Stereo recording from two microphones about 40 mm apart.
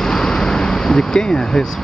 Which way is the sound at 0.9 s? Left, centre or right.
Centre.